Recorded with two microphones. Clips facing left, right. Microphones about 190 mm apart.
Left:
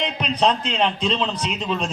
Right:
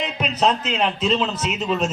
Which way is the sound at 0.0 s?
5° right (ahead or behind).